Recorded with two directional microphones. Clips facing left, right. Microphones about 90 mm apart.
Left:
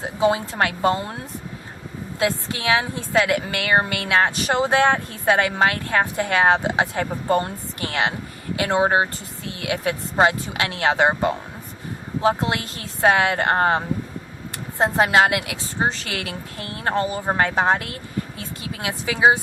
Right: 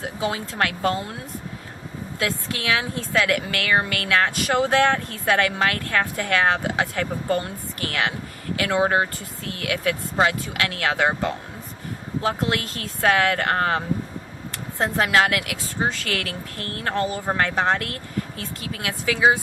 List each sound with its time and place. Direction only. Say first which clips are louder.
0.0 s speech: left 6 dB; 20° left (ahead or behind)
2.1 s a woman's voice: left 4 dB; 20° left (ahead or behind)